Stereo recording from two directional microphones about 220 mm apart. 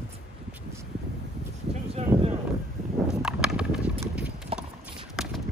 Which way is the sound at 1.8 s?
25° right (ahead or behind).